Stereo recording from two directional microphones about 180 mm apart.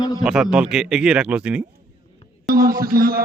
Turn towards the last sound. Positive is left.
turn(degrees=-55)  # may be behind; listen again after turning